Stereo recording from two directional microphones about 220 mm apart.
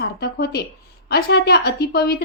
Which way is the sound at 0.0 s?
45° left (ahead or behind).